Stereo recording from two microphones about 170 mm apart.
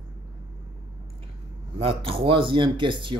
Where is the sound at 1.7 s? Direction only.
35° right (ahead or behind).